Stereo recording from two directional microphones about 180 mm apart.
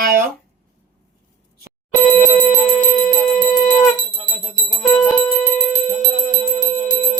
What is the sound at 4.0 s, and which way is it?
Music, 45° right (ahead or behind).